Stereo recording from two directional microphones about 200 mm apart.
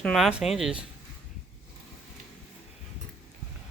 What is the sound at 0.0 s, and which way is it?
Speech, centre (ahead or behind).